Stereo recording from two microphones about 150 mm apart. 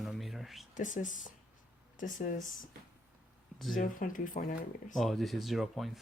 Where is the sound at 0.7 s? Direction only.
55° left (ahead or behind).